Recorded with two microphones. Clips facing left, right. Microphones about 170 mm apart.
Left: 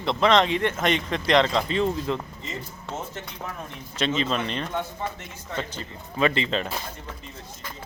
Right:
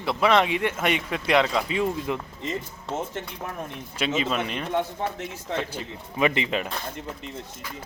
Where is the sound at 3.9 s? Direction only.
10° right (ahead or behind).